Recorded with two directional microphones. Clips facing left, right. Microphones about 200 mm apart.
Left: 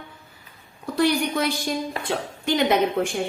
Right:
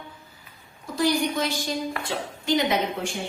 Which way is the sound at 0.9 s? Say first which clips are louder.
Left 2 dB; 60° left (ahead or behind).